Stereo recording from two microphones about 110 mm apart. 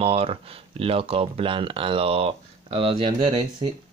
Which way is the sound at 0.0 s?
65° right (ahead or behind).